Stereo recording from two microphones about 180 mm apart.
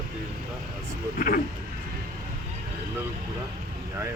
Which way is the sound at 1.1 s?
50° left (ahead or behind).